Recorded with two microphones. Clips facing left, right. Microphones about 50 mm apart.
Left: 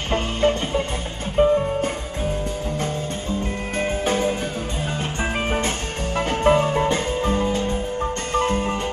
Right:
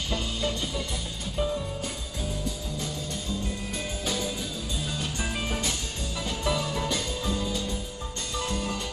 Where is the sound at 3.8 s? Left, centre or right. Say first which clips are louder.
Left 12 dB; left.